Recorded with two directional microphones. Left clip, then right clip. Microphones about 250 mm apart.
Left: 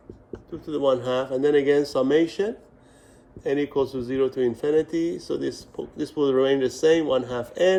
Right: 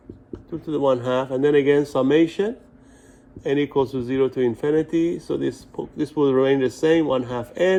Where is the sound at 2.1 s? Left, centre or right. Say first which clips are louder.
Right 3 dB; centre.